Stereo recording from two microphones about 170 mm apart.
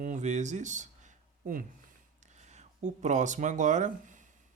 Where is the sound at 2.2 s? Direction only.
40° right (ahead or behind).